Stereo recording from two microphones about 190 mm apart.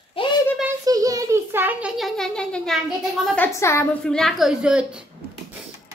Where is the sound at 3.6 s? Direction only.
15° left (ahead or behind).